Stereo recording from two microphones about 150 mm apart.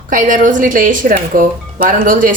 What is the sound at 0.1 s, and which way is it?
Speech, 60° right (ahead or behind).